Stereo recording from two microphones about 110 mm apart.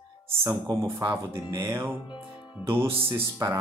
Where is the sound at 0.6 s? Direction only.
25° right (ahead or behind).